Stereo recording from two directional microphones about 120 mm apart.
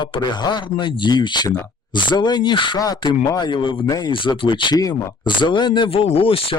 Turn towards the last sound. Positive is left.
turn(degrees=50)  # may be behind; listen again after turning